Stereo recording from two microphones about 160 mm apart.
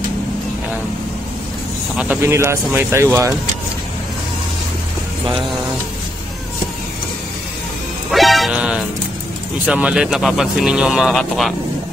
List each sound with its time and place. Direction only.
2.2 s speech: 15° right (ahead or behind)
8.1 s music: centre (ahead or behind)
9.7 s speech: 5° right (ahead or behind)